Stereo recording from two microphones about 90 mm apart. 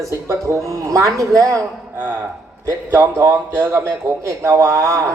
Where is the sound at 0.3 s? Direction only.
35° right (ahead or behind).